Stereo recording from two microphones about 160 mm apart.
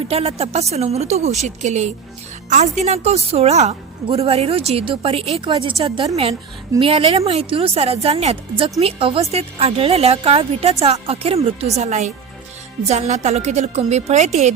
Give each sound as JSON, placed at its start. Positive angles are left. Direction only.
{"t": 0.0, "sound": "a woman's voice", "side_deg": -40}
{"t": 6.7, "sound": "a woman's voice", "side_deg": -35}